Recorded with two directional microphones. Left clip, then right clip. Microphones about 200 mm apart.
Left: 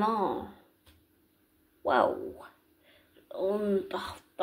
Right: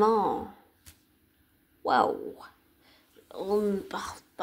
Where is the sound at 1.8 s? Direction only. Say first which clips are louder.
Right 1 dB; 45° right (ahead or behind).